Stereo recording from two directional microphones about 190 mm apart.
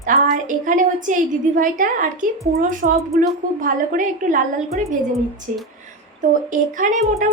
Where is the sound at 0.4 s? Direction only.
45° right (ahead or behind).